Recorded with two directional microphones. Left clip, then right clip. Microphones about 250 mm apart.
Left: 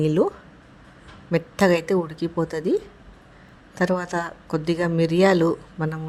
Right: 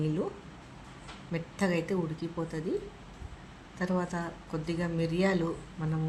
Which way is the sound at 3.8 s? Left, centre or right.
Left.